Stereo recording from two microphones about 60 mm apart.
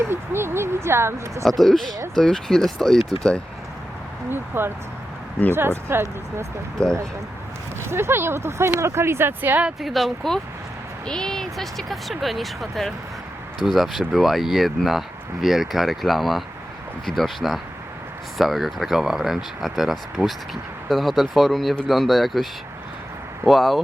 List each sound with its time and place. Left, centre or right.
0.0 s speech: right
1.5 s speech: centre
4.3 s speech: right
6.8 s speech: centre
7.9 s speech: right
9.8 s speech: centre
11.0 s speech: centre
23.5 s speech: centre